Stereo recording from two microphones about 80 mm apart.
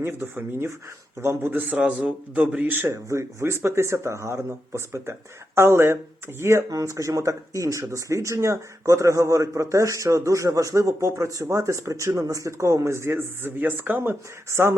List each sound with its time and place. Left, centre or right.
0.0 s speech: right
2.6 s speech: right
6.7 s speech: right